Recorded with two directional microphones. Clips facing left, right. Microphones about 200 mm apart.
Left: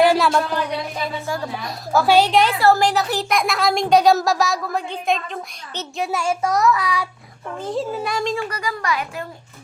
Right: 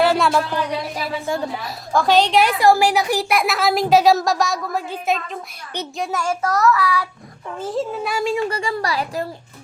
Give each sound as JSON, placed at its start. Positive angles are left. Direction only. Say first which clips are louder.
{"t": 0.2, "sound": "speech", "louder": "even", "side_deg": 0}
{"t": 1.3, "sound": "speech", "louder": "right 5 dB", "side_deg": -20}
{"t": 1.6, "sound": "child singing", "louder": "left 3 dB", "side_deg": 5}
{"t": 2.5, "sound": "speech", "louder": "right 1 dB", "side_deg": -15}
{"t": 6.1, "sound": "child singing", "louder": "left 1 dB", "side_deg": 10}
{"t": 7.6, "sound": "speech", "louder": "right 1 dB", "side_deg": 0}
{"t": 8.4, "sound": "a child's voice", "louder": "right 4 dB", "side_deg": -25}